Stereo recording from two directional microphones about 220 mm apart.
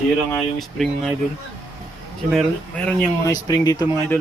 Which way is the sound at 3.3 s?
15° left (ahead or behind).